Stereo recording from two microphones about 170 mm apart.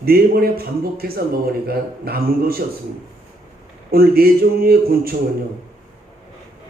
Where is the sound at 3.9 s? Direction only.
60° right (ahead or behind).